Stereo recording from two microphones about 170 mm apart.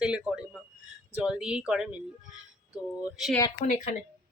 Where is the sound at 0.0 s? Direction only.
5° right (ahead or behind).